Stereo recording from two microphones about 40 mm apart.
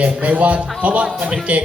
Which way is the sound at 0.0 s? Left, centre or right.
Right.